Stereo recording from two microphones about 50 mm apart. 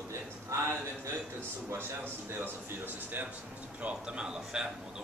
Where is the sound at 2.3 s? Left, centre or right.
Right.